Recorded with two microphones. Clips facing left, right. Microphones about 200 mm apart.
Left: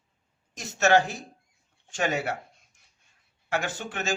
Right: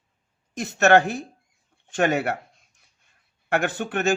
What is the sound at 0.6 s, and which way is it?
A man's voice, 60° right (ahead or behind).